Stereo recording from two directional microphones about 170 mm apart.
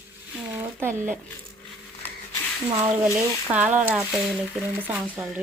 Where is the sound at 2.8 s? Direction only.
10° right (ahead or behind).